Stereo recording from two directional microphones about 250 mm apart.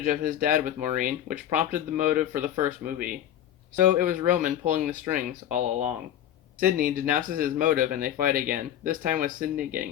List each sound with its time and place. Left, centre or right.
0.0 s speech: right
3.8 s speech: right